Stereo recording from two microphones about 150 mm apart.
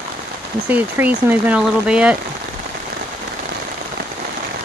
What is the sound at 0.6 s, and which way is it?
Speech, 10° right (ahead or behind).